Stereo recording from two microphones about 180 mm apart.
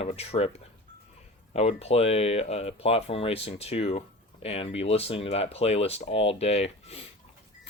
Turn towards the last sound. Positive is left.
turn(degrees=35)  # may be behind; listen again after turning